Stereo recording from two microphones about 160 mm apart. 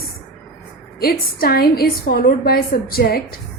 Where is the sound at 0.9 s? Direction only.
70° left (ahead or behind).